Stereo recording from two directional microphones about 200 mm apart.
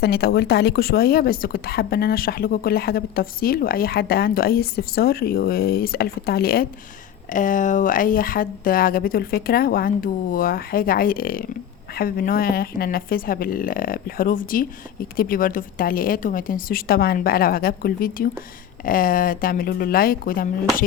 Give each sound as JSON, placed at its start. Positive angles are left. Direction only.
{"t": 0.0, "sound": "a woman's voice", "side_deg": 50}